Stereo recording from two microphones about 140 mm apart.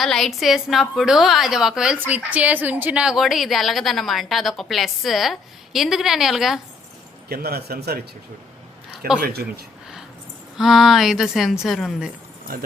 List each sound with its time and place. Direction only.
0.0 s a woman's voice: centre (ahead or behind)
7.3 s speech: 90° right
9.2 s speech: 90° right
10.6 s a woman's voice: centre (ahead or behind)